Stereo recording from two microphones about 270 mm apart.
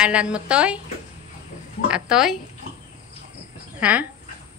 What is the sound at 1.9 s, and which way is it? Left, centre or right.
Speech, centre.